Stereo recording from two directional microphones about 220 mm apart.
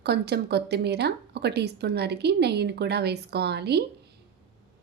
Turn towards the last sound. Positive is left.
turn(degrees=-50)  # may be behind; listen again after turning